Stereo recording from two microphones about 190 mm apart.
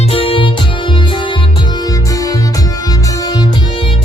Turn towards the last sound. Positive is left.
turn(degrees=25)  # may be behind; listen again after turning